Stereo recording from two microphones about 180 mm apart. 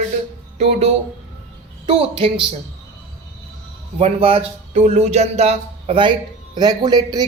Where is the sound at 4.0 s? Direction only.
30° right (ahead or behind).